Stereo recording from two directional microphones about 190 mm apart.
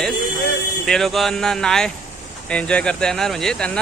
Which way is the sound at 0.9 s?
Centre (ahead or behind).